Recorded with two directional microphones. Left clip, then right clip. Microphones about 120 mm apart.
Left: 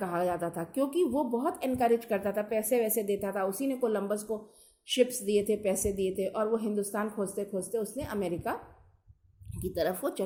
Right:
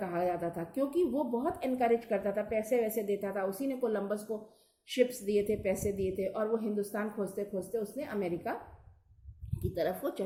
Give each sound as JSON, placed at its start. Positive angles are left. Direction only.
{"t": 0.0, "sound": "a woman's voice", "side_deg": 45}
{"t": 9.6, "sound": "a woman's voice", "side_deg": 45}